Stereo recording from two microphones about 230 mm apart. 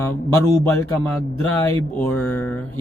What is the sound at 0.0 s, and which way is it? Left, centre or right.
Speech, centre.